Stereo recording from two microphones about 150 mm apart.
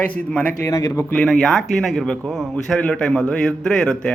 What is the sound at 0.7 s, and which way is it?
Speech, 25° left (ahead or behind).